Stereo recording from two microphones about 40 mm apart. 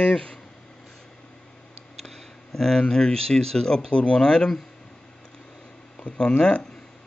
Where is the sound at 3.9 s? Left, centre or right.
Left.